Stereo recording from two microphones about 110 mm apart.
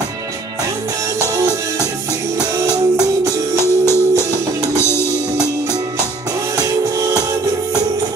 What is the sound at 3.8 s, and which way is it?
Music, 25° left (ahead or behind).